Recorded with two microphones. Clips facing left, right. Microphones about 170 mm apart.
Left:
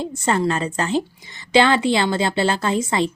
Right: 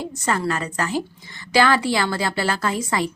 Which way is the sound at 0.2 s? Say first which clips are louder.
Left 3 dB; 25° left (ahead or behind).